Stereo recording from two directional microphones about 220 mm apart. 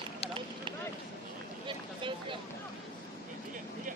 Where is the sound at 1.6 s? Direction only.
20° right (ahead or behind).